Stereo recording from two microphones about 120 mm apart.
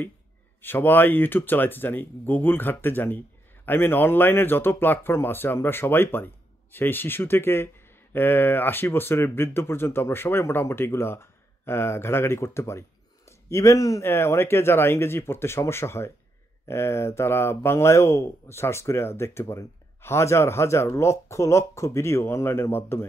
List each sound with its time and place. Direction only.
0.6 s speech: 15° left (ahead or behind)